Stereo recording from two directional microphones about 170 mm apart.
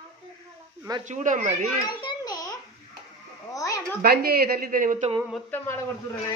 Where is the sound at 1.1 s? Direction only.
45° right (ahead or behind).